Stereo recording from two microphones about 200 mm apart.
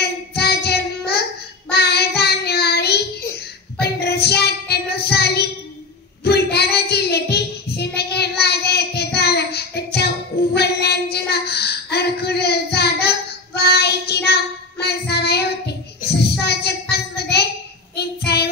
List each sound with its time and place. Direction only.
0.0 s child singing: 55° left (ahead or behind)
16.9 s a sound: 55° left (ahead or behind)
17.9 s child singing: 55° left (ahead or behind)